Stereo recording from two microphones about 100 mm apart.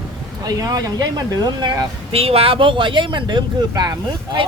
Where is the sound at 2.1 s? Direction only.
75° right (ahead or behind); by 4.4 s 40° right (ahead or behind).